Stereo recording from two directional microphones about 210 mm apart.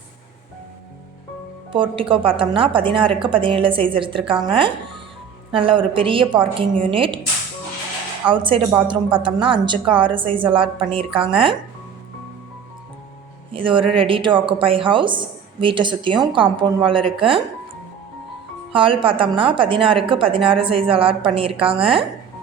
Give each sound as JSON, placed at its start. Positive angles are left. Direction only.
{"t": 1.7, "sound": "a woman's voice", "side_deg": -25}
{"t": 8.3, "sound": "a woman's voice", "side_deg": -25}
{"t": 13.7, "sound": "a woman's voice", "side_deg": -25}
{"t": 18.7, "sound": "a woman's voice", "side_deg": -25}